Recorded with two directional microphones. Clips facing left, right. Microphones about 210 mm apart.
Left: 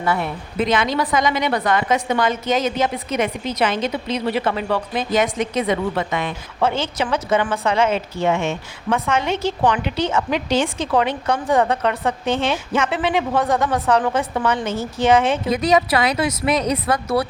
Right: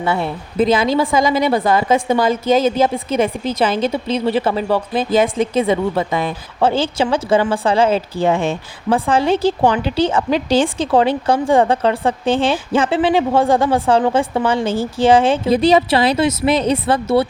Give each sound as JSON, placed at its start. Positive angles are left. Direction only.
{"t": 0.0, "sound": "a woman's voice", "side_deg": -30}